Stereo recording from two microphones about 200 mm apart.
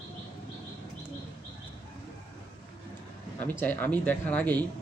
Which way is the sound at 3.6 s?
10° left (ahead or behind).